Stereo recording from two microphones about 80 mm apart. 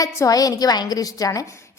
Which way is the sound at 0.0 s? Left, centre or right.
Left.